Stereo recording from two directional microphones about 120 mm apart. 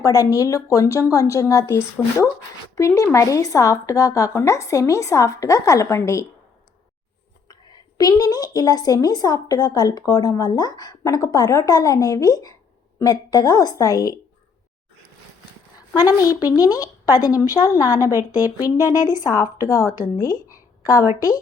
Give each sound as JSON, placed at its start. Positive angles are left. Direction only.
{"t": 0.0, "sound": "a woman's voice", "side_deg": 30}
{"t": 7.4, "sound": "a woman's voice", "side_deg": 35}
{"t": 16.0, "sound": "a woman's voice", "side_deg": 35}
{"t": 18.1, "sound": "speech", "side_deg": -20}
{"t": 19.1, "sound": "a woman's voice", "side_deg": 30}
{"t": 21.1, "sound": "speech", "side_deg": -20}